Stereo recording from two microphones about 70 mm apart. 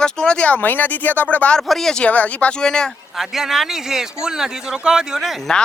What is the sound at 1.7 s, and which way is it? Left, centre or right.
Speech, centre.